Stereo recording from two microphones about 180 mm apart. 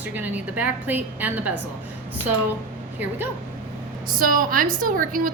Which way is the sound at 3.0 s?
10° right (ahead or behind).